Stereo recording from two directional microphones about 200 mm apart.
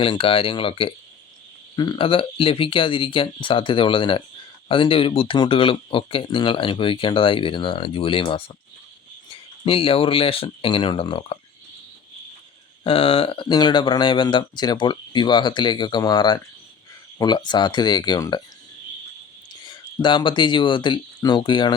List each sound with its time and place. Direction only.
0.0 s speech: 25° left (ahead or behind)
12.8 s speech: 25° left (ahead or behind)
19.6 s speech: 25° left (ahead or behind)